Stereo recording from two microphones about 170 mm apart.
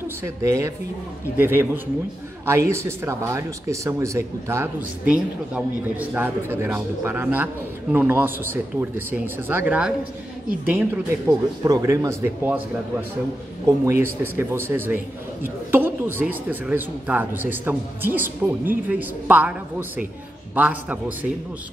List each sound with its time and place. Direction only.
0.2 s speech: 20° right (ahead or behind)
11.2 s speech: 20° right (ahead or behind)
13.7 s speech: 15° right (ahead or behind)
20.5 s speech: 10° right (ahead or behind)